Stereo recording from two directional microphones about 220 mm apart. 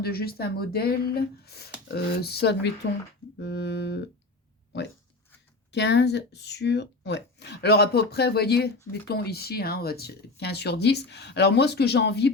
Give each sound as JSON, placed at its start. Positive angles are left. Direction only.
{"t": 0.0, "sound": "speech", "side_deg": 45}
{"t": 5.7, "sound": "speech", "side_deg": 50}